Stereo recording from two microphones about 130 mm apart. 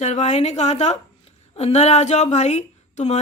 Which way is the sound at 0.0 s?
60° left (ahead or behind).